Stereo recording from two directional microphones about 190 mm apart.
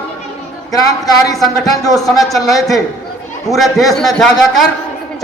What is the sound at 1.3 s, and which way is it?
Speech, centre (ahead or behind).